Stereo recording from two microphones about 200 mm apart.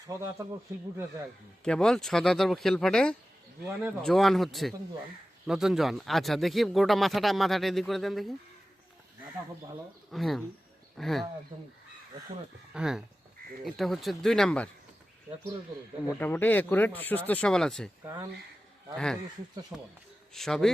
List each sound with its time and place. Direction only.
0.1 s speech: 15° right (ahead or behind)
1.6 s speech: 5° left (ahead or behind)
10.1 s speech: centre (ahead or behind)
12.7 s speech: 5° right (ahead or behind)
16.0 s speech: 10° left (ahead or behind)
18.0 s speech: 15° right (ahead or behind)
18.9 s speech: 5° left (ahead or behind)